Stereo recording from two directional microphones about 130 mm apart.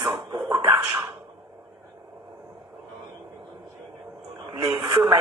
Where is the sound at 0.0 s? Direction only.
45° right (ahead or behind).